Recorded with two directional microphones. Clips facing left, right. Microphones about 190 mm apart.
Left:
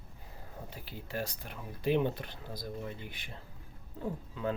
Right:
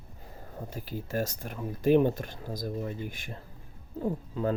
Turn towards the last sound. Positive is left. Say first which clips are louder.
# right 6 dB
turn(degrees=-40)  # may be behind; listen again after turning